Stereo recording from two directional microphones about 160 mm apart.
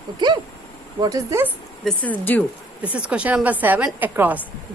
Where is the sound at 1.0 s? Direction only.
20° right (ahead or behind).